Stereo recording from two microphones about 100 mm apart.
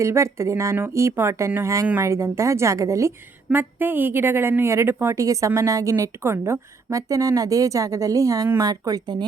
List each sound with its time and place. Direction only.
0.0 s a woman's voice: 30° right (ahead or behind)
3.5 s a woman's voice: 20° right (ahead or behind); by 9.2 s 40° right (ahead or behind)